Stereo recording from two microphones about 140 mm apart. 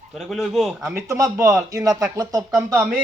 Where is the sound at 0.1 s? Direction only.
Centre (ahead or behind).